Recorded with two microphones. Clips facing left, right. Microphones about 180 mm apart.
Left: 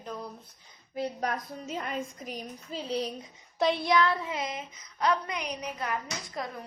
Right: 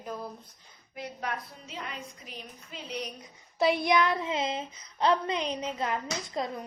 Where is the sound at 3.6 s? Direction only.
15° right (ahead or behind).